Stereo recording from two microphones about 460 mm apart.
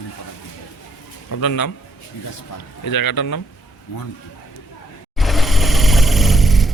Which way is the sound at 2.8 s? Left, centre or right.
Left.